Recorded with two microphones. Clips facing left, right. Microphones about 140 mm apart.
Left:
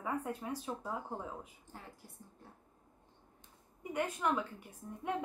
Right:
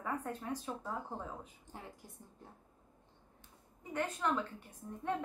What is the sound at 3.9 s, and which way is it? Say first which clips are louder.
A woman's voice: left 1 dB; 10° left (ahead or behind).